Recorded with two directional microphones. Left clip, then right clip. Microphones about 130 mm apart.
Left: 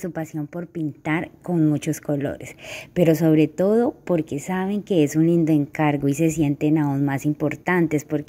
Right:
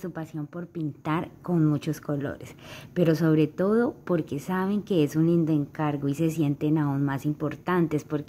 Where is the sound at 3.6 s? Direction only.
Centre (ahead or behind).